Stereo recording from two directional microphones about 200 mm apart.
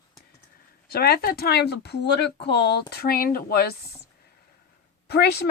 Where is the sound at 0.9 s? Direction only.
50° left (ahead or behind).